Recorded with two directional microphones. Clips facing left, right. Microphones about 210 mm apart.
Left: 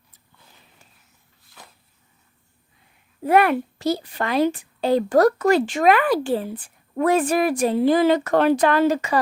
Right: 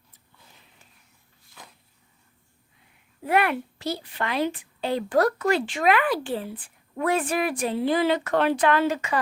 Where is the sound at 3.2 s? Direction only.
40° left (ahead or behind).